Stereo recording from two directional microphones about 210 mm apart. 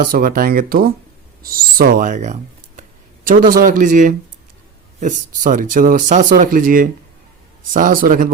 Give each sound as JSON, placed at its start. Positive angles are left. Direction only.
{"t": 0.0, "sound": "speech", "side_deg": -40}